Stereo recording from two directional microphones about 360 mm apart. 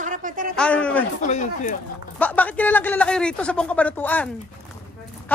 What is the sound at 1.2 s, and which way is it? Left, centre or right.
Speech, centre.